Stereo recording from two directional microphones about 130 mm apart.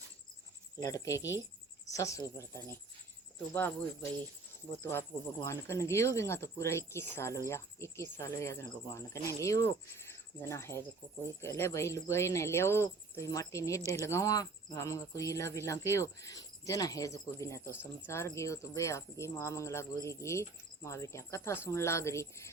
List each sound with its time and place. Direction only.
0.8 s speech: 25° left (ahead or behind)
4.8 s speech: 20° left (ahead or behind)